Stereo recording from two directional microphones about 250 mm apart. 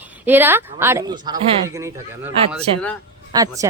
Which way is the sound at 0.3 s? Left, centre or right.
Centre.